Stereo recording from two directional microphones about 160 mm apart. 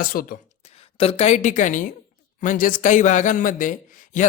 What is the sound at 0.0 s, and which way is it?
Speech, 65° left (ahead or behind).